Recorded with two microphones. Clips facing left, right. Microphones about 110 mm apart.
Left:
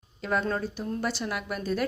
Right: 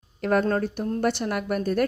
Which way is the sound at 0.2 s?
55° right (ahead or behind).